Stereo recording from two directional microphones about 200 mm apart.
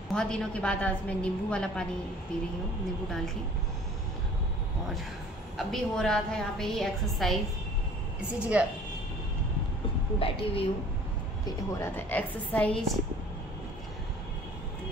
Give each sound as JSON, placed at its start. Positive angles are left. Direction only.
{"t": 0.1, "sound": "a woman's voice", "side_deg": 5}
{"t": 5.6, "sound": "a woman's voice", "side_deg": 0}
{"t": 8.5, "sound": "a woman's voice", "side_deg": -5}
{"t": 10.1, "sound": "a woman's voice", "side_deg": 30}
{"t": 11.4, "sound": "a woman's voice", "side_deg": 10}